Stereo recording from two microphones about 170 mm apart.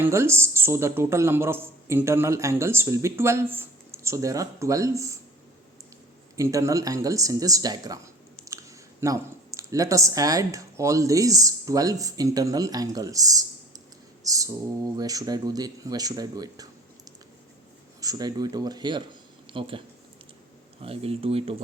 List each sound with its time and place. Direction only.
0.0 s speech: 15° right (ahead or behind)
6.3 s speech: 20° right (ahead or behind)
18.0 s speech: 20° right (ahead or behind)
20.8 s speech: 35° right (ahead or behind)